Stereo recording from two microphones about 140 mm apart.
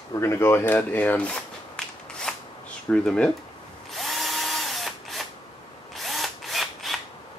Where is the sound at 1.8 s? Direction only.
5° left (ahead or behind).